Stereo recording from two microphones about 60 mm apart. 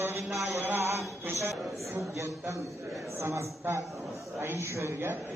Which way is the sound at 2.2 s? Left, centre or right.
Right.